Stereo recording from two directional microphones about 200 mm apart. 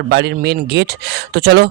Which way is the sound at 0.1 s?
55° right (ahead or behind).